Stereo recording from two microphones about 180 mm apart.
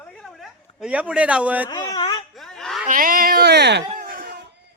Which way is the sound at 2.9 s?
50° right (ahead or behind).